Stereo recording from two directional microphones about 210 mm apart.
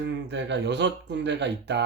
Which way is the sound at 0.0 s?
55° right (ahead or behind).